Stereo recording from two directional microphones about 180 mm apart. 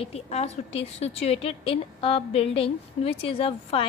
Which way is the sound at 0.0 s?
35° left (ahead or behind).